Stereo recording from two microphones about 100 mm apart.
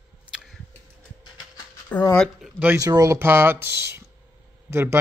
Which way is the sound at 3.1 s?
25° right (ahead or behind).